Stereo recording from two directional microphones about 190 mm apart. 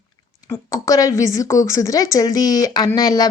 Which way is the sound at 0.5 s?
20° left (ahead or behind).